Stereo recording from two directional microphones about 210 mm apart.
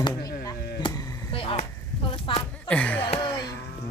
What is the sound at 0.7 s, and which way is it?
Chop, 20° left (ahead or behind).